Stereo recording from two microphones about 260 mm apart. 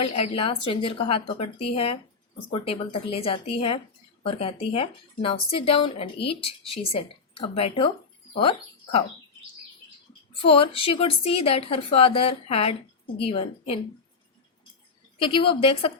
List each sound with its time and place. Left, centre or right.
0.0 s a woman's voice: left
10.4 s a woman's voice: left
15.2 s a woman's voice: centre